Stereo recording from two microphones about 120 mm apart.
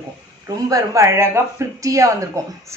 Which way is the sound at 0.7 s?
25° right (ahead or behind).